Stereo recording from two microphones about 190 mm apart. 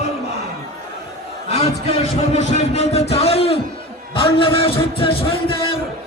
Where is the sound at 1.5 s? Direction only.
30° left (ahead or behind).